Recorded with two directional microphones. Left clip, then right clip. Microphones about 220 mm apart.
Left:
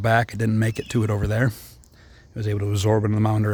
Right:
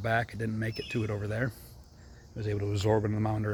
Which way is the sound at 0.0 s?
45° left (ahead or behind).